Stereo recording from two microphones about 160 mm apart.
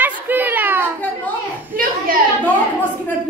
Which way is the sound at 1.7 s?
60° right (ahead or behind).